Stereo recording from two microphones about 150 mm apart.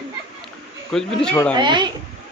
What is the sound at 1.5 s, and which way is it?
Speech, 30° right (ahead or behind).